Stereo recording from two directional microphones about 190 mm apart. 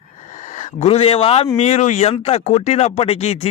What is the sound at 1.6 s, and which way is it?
Speech, 35° left (ahead or behind).